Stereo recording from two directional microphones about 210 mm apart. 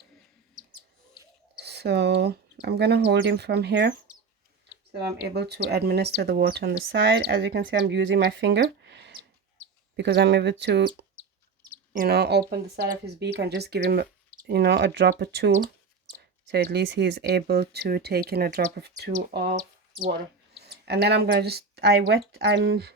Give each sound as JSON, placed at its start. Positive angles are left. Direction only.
{"t": 1.6, "sound": "speech", "side_deg": -50}
{"t": 5.3, "sound": "speech", "side_deg": -50}
{"t": 11.9, "sound": "speech", "side_deg": -50}
{"t": 20.6, "sound": "speech", "side_deg": -50}